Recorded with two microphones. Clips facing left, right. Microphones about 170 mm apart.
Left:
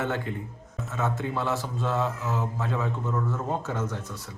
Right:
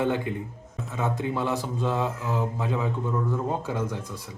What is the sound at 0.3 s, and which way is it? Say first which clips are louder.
Speech: right 3 dB; 15° right (ahead or behind).